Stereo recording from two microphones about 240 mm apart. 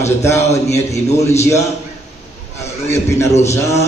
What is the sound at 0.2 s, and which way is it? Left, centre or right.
Speech, centre.